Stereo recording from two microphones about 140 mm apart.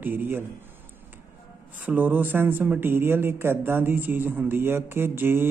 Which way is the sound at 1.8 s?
10° right (ahead or behind).